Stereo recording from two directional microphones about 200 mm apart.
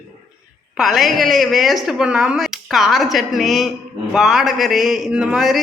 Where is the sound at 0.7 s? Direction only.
Centre (ahead or behind).